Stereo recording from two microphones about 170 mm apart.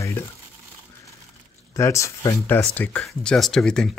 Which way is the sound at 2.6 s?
5° left (ahead or behind).